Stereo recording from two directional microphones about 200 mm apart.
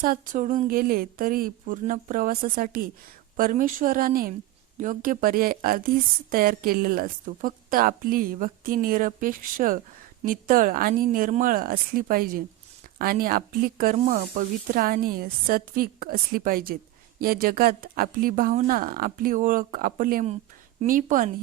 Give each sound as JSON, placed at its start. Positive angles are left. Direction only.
{"t": 0.0, "sound": "a woman's voice", "side_deg": -45}